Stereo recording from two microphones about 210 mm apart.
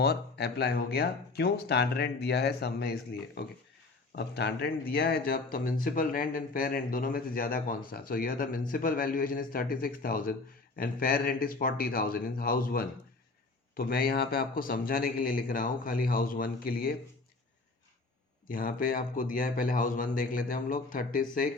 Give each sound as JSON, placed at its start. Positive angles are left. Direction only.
{"t": 0.0, "sound": "speech", "side_deg": 50}
{"t": 18.4, "sound": "speech", "side_deg": 40}